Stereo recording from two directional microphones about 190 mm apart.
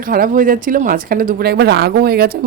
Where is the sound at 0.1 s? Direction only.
50° right (ahead or behind).